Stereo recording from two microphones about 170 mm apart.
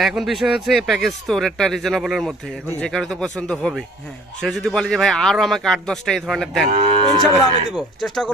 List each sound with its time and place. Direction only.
0.0 s speech: centre (ahead or behind)
6.7 s cattle: 30° right (ahead or behind)
7.7 s speech: centre (ahead or behind)